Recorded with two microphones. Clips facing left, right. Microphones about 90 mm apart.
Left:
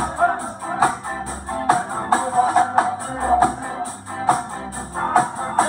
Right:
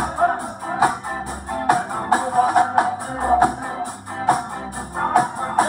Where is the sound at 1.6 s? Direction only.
15° right (ahead or behind).